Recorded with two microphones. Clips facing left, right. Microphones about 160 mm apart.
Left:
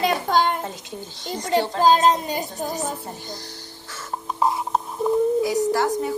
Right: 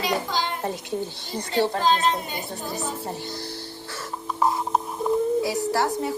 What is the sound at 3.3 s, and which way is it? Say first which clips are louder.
Music: right 4 dB; 65° right (ahead or behind).